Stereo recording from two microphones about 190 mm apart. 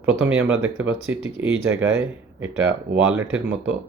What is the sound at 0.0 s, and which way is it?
Speech, 90° right.